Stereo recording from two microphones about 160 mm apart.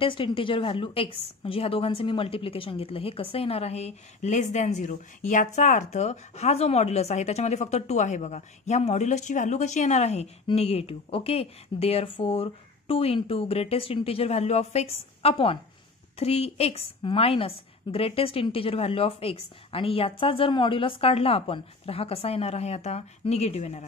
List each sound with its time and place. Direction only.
0.0 s a woman's voice: 35° left (ahead or behind)